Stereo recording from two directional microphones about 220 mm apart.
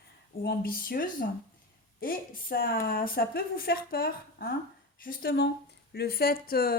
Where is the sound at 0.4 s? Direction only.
40° left (ahead or behind).